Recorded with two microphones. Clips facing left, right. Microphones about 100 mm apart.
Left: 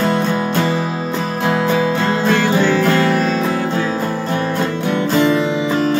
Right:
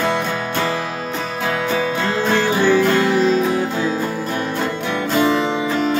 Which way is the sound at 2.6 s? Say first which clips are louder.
Even; 15° right (ahead or behind).